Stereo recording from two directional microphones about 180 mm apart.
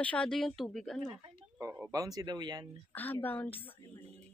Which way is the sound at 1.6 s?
15° right (ahead or behind).